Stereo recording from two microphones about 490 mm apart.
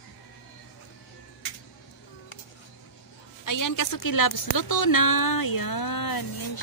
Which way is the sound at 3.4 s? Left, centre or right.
Left.